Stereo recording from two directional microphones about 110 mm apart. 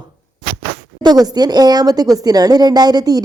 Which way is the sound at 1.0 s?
40° right (ahead or behind).